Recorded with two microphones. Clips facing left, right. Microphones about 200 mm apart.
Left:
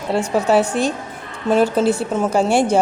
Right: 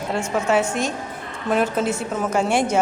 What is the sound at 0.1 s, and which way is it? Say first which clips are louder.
A woman's voice: left 5 dB; 35° left (ahead or behind).